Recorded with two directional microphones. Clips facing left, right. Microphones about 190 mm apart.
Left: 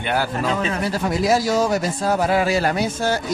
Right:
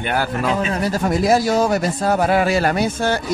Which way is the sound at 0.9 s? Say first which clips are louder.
Right 3 dB; 50° right (ahead or behind).